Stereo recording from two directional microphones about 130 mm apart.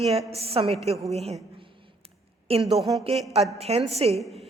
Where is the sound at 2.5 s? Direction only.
50° right (ahead or behind).